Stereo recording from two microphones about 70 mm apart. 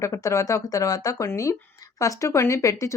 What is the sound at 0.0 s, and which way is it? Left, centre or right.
A woman's voice, left.